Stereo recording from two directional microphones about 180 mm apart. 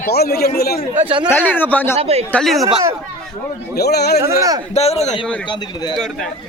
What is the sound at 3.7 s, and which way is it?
Speech, 65° left (ahead or behind).